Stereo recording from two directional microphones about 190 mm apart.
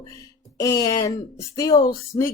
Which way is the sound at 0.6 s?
20° left (ahead or behind).